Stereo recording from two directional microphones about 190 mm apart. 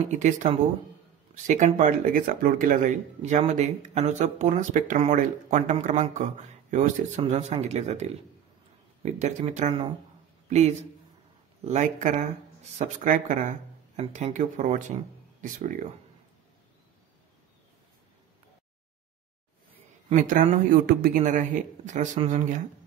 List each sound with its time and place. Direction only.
0.1 s speech: 40° right (ahead or behind)
20.1 s speech: 40° right (ahead or behind)